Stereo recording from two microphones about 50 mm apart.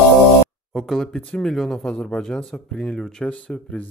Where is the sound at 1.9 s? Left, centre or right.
Centre.